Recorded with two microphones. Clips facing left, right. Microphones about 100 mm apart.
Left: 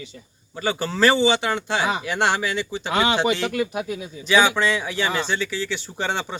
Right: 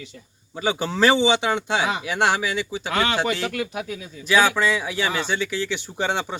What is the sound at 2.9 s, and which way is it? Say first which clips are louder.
Speech: left 2 dB; 15° left (ahead or behind).